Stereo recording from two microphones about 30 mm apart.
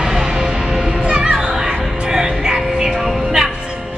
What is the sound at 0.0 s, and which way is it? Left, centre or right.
Music, centre.